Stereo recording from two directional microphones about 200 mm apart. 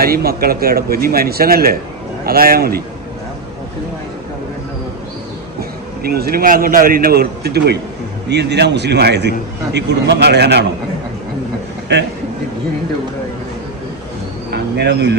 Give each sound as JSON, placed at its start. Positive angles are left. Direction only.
{"t": 0.0, "sound": "speech", "side_deg": -50}
{"t": 5.5, "sound": "a man's voice", "side_deg": -50}
{"t": 11.9, "sound": "a man's voice", "side_deg": -60}
{"t": 14.5, "sound": "speech", "side_deg": -60}